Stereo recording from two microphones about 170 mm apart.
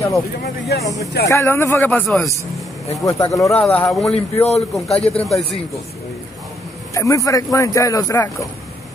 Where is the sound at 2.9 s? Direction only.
20° left (ahead or behind).